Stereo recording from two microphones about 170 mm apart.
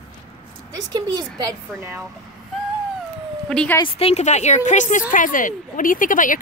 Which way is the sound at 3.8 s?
35° left (ahead or behind).